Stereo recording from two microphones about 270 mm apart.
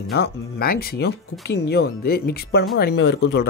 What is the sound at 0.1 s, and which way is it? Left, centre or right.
Speech, left.